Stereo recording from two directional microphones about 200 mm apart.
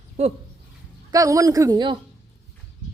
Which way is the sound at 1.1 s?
15° right (ahead or behind).